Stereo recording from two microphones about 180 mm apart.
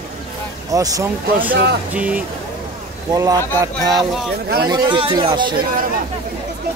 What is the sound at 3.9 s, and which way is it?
Speech, centre (ahead or behind).